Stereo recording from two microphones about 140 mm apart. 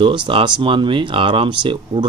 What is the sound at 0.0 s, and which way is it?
Speech, 35° right (ahead or behind).